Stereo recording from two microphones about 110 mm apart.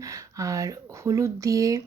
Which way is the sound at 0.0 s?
30° right (ahead or behind).